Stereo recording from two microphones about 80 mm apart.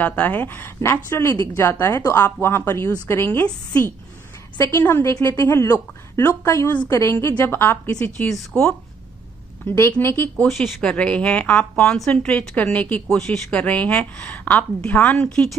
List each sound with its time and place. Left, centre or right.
0.0 s a woman's voice: left
8.3 s a woman's voice: centre
10.0 s a woman's voice: left
10.4 s a woman's voice: centre